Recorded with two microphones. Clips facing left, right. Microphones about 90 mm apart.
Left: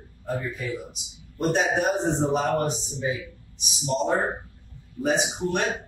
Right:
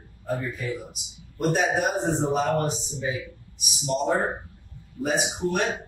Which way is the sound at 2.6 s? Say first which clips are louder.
Even; 20° right (ahead or behind).